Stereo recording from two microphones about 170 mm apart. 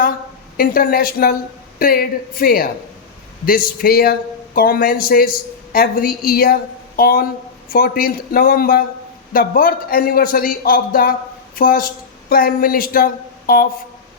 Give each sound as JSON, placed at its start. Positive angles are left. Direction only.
{"t": 0.5, "sound": "a man's voice", "side_deg": 60}